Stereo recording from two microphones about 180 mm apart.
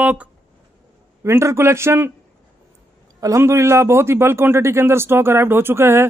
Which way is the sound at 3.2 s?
15° right (ahead or behind).